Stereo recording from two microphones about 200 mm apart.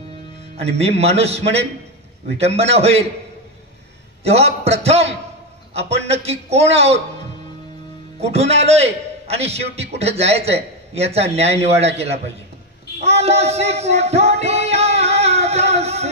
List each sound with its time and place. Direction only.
0.6 s a man's voice: 30° right (ahead or behind)
4.2 s a man's voice: 30° right (ahead or behind)
8.2 s a man's voice: 30° right (ahead or behind)
13.0 s music: 30° right (ahead or behind)